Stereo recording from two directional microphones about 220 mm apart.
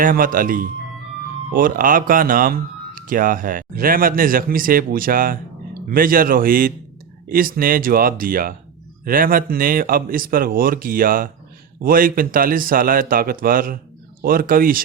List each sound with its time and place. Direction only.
0.0 s speech: 40° right (ahead or behind)